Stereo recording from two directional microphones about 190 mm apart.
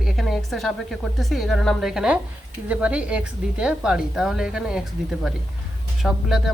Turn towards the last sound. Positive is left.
turn(degrees=0)  # may be behind; listen again after turning